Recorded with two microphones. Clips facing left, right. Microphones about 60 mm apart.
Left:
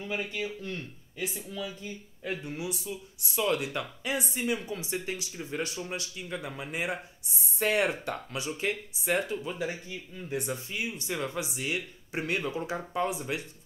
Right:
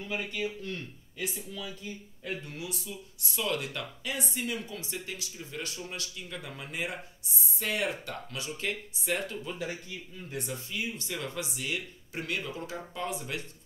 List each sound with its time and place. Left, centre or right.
0.0 s speech: centre
2.4 s speech: centre
7.5 s speech: left; by 9.7 s centre
10.4 s speech: left
10.8 s speech: centre